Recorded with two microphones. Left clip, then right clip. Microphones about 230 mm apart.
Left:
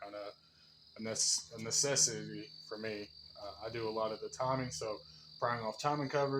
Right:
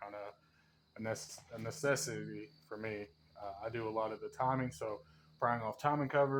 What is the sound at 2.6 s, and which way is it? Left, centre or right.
Cricket, right.